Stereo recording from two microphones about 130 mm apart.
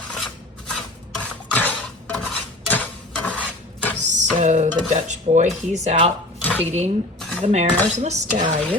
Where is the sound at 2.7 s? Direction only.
10° left (ahead or behind).